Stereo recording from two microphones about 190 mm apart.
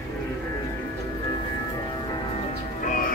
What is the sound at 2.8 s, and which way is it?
Music, 45° left (ahead or behind).